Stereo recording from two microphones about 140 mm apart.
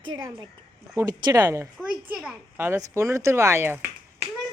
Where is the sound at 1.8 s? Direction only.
5° right (ahead or behind).